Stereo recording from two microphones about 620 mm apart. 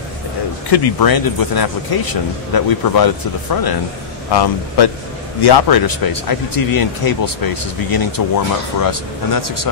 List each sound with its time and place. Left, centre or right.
0.7 s speech: left